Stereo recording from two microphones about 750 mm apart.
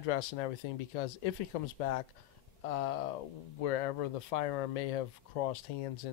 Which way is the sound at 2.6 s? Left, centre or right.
Left.